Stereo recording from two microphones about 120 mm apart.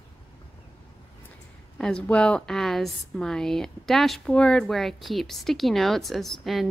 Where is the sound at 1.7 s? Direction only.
5° left (ahead or behind).